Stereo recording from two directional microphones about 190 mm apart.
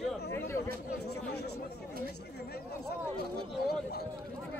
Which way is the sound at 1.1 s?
60° left (ahead or behind).